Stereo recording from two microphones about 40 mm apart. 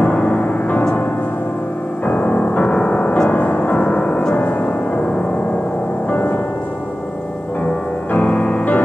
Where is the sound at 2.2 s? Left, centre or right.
Left.